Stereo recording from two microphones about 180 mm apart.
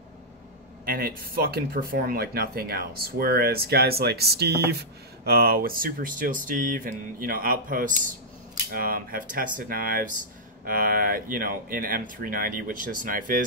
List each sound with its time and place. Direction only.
0.8 s speech: 55° right (ahead or behind)